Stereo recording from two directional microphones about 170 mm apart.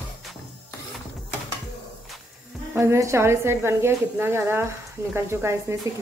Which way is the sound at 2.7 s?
15° right (ahead or behind).